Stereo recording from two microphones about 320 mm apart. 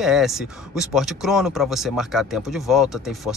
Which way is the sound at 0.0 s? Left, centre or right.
Centre.